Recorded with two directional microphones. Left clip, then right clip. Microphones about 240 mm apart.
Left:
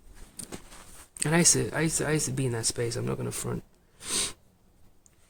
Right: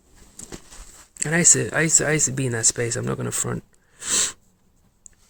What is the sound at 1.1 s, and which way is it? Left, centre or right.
Speech, centre.